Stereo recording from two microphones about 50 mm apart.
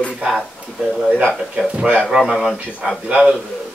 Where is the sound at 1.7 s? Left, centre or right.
Right.